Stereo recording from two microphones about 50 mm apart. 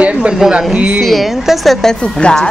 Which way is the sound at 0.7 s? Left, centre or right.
Right.